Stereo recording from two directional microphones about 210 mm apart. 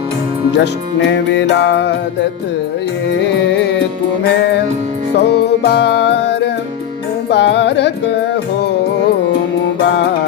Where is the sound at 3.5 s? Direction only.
55° left (ahead or behind).